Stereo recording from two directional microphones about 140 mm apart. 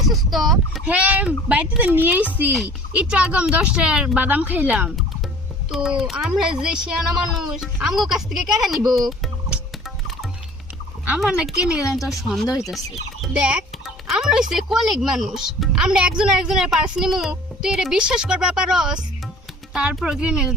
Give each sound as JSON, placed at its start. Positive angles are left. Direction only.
{"t": 0.1, "sound": "a woman's voice", "side_deg": 0}
{"t": 9.0, "sound": "music", "side_deg": 0}
{"t": 11.0, "sound": "a woman's voice", "side_deg": -10}
{"t": 12.5, "sound": "speech", "side_deg": 20}
{"t": 13.2, "sound": "a woman's voice", "side_deg": -5}